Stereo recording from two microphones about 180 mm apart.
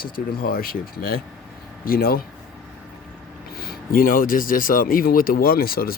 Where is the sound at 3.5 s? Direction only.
55° left (ahead or behind).